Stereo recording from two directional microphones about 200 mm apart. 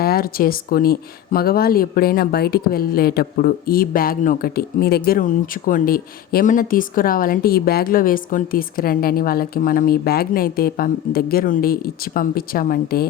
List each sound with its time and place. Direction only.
0.0 s speech: 50° left (ahead or behind)